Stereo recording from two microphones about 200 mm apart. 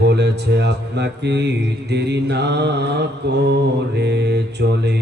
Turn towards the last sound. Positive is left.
turn(degrees=-55)  # may be behind; listen again after turning